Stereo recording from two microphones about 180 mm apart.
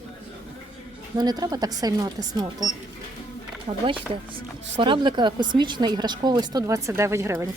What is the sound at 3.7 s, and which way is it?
Speech, 35° right (ahead or behind).